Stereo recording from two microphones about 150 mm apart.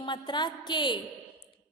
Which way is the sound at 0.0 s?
30° left (ahead or behind).